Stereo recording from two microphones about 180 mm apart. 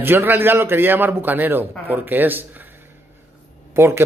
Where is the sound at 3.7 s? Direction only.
15° right (ahead or behind).